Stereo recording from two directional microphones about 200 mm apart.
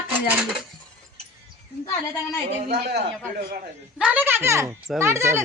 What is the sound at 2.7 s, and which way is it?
Speech, 55° right (ahead or behind).